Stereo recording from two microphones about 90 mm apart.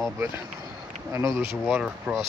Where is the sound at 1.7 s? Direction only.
10° right (ahead or behind).